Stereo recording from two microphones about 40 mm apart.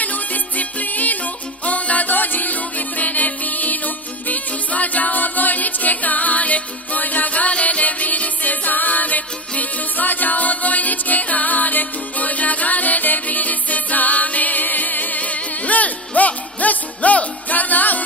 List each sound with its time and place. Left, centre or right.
0.0 s music: left